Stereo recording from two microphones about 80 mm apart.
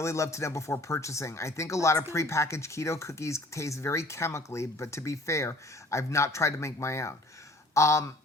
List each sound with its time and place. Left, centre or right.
0.0 s speech: left